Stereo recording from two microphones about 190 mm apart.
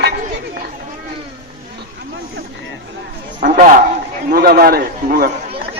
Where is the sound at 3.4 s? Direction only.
45° right (ahead or behind).